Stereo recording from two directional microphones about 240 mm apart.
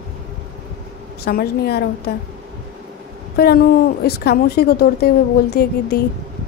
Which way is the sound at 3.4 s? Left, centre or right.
Left.